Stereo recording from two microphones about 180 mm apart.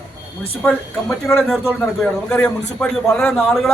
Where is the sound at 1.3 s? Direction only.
5° left (ahead or behind).